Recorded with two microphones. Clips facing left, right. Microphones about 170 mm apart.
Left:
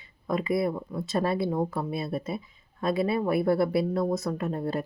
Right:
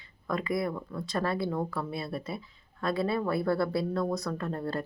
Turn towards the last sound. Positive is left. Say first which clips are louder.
# left 3 dB
turn(degrees=20)  # may be behind; listen again after turning